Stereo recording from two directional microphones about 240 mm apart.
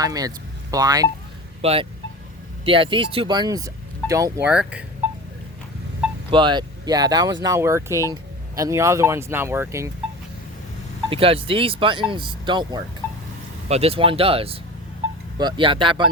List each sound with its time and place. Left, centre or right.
0.0 s speech: centre
6.3 s speech: centre
11.1 s speech: right